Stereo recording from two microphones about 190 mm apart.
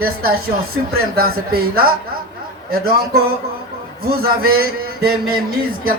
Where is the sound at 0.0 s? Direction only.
50° right (ahead or behind).